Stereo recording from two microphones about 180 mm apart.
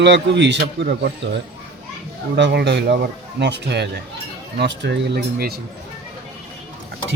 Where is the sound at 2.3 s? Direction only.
70° right (ahead or behind).